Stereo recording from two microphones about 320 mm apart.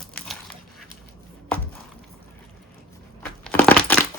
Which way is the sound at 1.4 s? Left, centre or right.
Centre.